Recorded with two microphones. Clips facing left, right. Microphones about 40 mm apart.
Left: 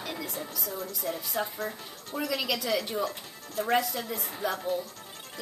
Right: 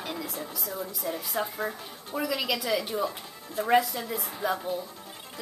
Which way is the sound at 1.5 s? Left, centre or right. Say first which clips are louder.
Right 2 dB; centre.